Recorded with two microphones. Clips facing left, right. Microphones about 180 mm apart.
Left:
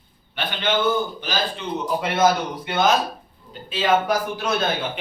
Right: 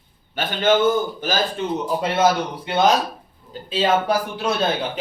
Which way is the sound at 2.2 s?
30° right (ahead or behind).